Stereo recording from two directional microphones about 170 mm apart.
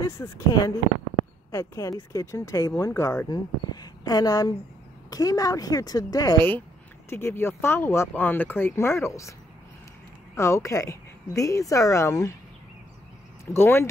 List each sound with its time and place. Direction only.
0.0 s speech: 20° left (ahead or behind)
10.3 s speech: 15° left (ahead or behind)
13.5 s speech: 15° left (ahead or behind)